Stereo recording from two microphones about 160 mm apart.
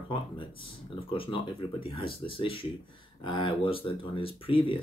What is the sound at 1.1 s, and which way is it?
Speech, 35° left (ahead or behind).